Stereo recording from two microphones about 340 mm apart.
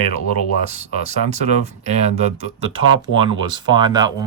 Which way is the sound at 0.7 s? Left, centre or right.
Centre.